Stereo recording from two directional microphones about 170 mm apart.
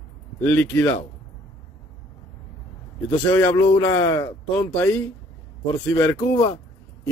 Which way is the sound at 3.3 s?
10° left (ahead or behind).